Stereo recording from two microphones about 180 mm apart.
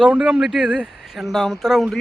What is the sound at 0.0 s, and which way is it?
Speech, 5° right (ahead or behind).